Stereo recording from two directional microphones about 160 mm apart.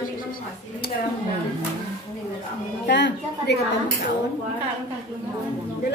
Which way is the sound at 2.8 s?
90° left.